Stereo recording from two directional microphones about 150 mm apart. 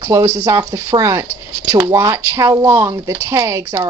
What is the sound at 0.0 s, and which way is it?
A woman's voice, 20° right (ahead or behind).